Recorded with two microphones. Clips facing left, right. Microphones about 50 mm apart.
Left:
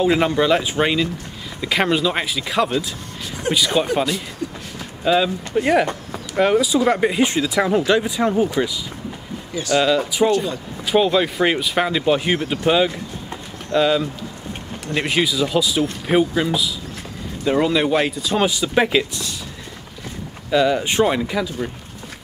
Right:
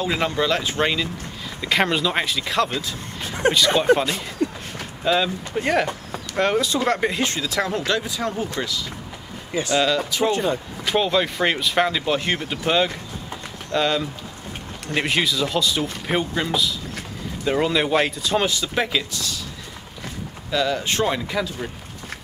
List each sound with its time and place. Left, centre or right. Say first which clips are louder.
0.0 s speech: left 5 dB; centre
3.3 s speech: right 3 dB; right
3.5 s speech: left 3 dB; centre
4.4 s a sound: right 5 dB; right
5.0 s speech: left 3 dB; centre
9.8 s speech: left 4 dB; centre
10.3 s speech: left 1 dB; right
11.0 s speech: left 4 dB; centre
18.5 s speech: left 5 dB; centre
20.5 s speech: left 5 dB; centre